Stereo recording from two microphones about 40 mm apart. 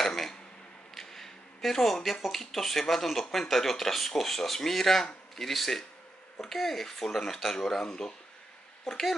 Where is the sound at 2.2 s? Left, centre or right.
Centre.